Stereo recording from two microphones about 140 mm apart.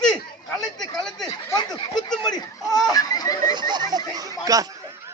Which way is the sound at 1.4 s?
25° left (ahead or behind).